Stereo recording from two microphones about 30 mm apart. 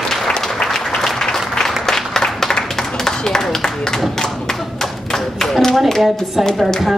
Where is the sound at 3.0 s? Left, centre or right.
Centre.